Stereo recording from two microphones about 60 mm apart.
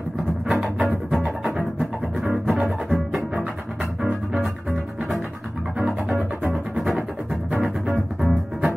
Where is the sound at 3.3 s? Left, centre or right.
Centre.